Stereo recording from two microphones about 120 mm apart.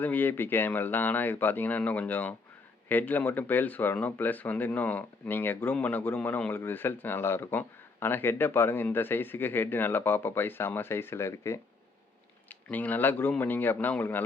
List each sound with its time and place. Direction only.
0.0 s speech: 15° left (ahead or behind)
12.6 s speech: 15° left (ahead or behind)